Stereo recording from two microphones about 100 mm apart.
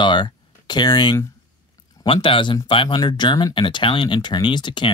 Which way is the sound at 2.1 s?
60° left (ahead or behind).